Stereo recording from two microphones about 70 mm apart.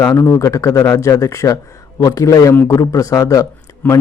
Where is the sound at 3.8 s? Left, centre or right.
Left.